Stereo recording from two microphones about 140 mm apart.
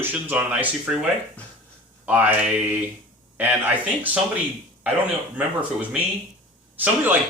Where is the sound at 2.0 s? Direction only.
10° right (ahead or behind).